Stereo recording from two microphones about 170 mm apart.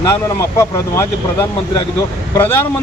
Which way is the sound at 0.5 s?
15° left (ahead or behind).